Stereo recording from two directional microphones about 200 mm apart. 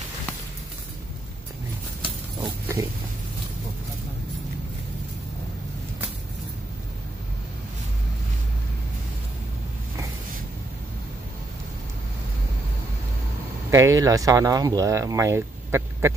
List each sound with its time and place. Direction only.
2.4 s pig: 15° right (ahead or behind)
13.7 s speech: 15° right (ahead or behind)